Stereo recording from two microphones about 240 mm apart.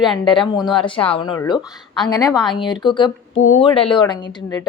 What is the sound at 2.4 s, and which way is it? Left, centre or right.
Speech, centre.